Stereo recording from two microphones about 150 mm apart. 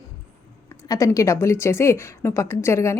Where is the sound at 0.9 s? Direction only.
20° left (ahead or behind).